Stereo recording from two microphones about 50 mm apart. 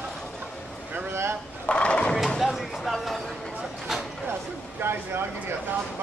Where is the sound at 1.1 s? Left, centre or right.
Right.